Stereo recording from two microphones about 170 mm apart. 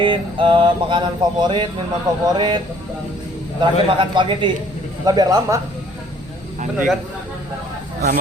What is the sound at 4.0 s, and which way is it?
Mantra, 30° right (ahead or behind).